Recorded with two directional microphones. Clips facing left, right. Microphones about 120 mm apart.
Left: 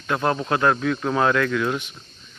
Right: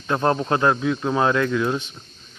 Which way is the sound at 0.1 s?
30° right (ahead or behind).